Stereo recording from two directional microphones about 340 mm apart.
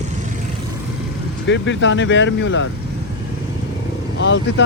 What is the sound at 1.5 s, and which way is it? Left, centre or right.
Speech, left.